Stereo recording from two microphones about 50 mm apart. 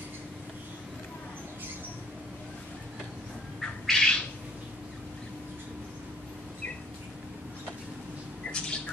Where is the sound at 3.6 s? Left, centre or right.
Centre.